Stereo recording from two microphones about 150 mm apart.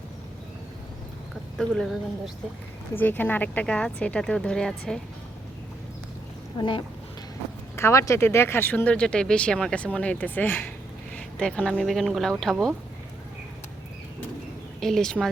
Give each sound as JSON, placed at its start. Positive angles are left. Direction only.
{"t": 1.5, "sound": "speech", "side_deg": 0}
{"t": 2.9, "sound": "speech", "side_deg": 15}
{"t": 6.6, "sound": "speech", "side_deg": 35}
{"t": 7.8, "sound": "speech", "side_deg": 20}
{"t": 14.8, "sound": "speech", "side_deg": 0}